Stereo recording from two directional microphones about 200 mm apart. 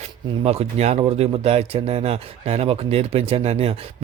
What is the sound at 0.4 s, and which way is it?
Speech, 30° right (ahead or behind).